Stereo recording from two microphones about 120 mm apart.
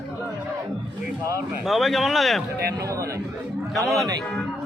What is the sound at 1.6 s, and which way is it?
Speech, centre (ahead or behind).